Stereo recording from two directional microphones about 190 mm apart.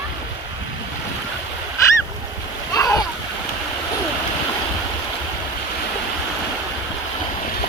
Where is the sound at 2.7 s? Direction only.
20° left (ahead or behind).